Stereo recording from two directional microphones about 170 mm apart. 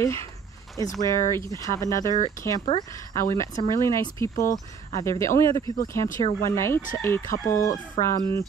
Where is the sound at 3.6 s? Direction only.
15° left (ahead or behind).